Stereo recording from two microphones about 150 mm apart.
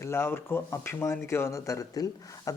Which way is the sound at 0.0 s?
15° left (ahead or behind).